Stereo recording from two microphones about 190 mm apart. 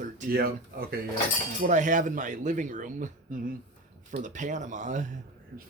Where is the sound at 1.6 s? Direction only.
40° right (ahead or behind).